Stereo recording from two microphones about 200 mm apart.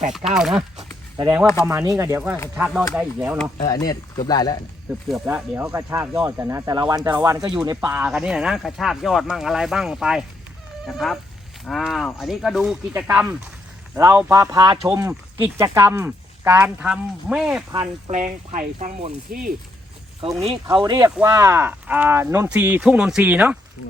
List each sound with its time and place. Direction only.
0.3 s speech: centre (ahead or behind)
1.1 s speech: 20° right (ahead or behind)
3.7 s speech: 20° left (ahead or behind)
5.0 s speech: 5° right (ahead or behind)
7.8 s speech: 5° right (ahead or behind)
17.7 s speech: 35° right (ahead or behind)
20.4 s speech: 25° right (ahead or behind); by 23.6 s 10° right (ahead or behind)